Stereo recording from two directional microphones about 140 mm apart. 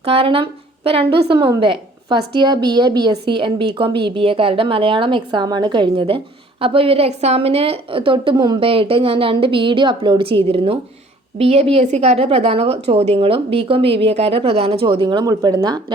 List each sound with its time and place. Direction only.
0.0 s a woman's voice: 45° right (ahead or behind)